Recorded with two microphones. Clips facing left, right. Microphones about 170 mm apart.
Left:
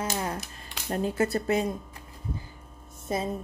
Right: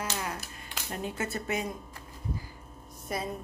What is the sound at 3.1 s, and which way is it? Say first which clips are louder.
Speech: left 5 dB; 25° left (ahead or behind).